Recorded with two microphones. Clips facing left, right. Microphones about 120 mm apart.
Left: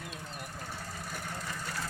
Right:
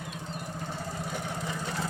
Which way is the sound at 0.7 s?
20° right (ahead or behind).